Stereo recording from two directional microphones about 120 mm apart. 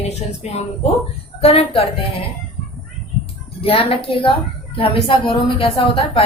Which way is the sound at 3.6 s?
50° left (ahead or behind).